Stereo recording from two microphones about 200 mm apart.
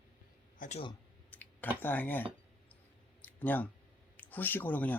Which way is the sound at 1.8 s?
10° left (ahead or behind).